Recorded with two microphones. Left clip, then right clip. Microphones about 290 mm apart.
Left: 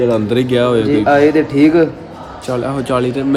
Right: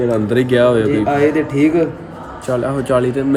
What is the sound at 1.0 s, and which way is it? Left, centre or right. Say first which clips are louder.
Speech: left 4 dB; left.